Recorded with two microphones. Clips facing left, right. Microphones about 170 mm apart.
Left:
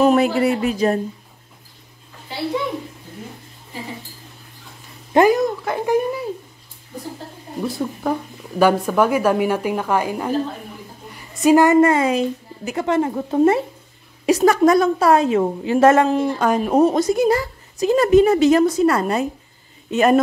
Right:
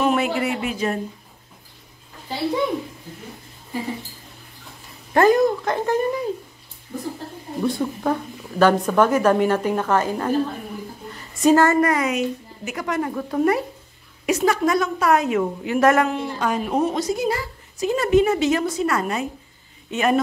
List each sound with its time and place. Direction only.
0.0 s speech: 40° left (ahead or behind)
5.3 s speech: centre (ahead or behind)
7.6 s a woman's voice: centre (ahead or behind); by 13.7 s 25° left (ahead or behind)
14.2 s a woman's voice: 40° left (ahead or behind)
16.2 s a woman's voice: 45° left (ahead or behind)